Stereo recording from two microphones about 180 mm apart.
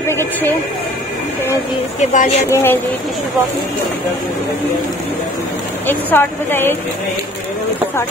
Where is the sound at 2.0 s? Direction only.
40° left (ahead or behind).